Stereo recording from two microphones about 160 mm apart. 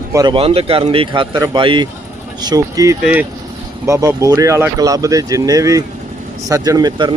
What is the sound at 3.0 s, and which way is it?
Speech, 10° right (ahead or behind).